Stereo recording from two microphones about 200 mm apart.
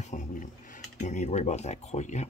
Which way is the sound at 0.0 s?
40° left (ahead or behind).